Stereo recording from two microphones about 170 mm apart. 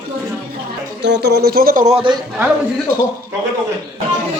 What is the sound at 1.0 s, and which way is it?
Speech, 90° right.